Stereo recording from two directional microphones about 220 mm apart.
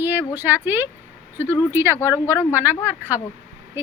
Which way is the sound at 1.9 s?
15° left (ahead or behind).